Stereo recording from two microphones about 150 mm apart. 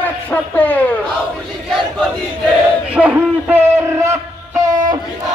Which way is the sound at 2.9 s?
10° right (ahead or behind).